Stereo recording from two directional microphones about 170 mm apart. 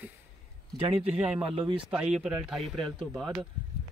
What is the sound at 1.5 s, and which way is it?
Speech, 30° right (ahead or behind).